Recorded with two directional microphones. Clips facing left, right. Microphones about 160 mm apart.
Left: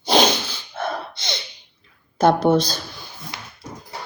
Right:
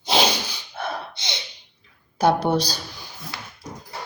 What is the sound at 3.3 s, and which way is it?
Dog, 20° left (ahead or behind).